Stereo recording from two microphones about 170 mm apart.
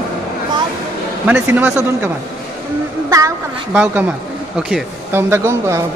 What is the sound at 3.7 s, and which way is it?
Speech, 10° right (ahead or behind).